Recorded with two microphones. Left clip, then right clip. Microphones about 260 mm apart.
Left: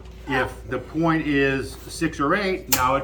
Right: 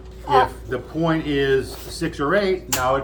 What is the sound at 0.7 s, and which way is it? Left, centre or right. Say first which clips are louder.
Speech: left 3 dB; centre.